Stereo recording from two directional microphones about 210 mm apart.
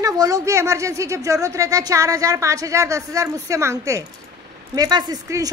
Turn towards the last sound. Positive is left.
turn(degrees=-15)  # may be behind; listen again after turning